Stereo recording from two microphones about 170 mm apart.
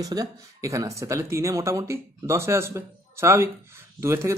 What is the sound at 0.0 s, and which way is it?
Speech, 20° right (ahead or behind).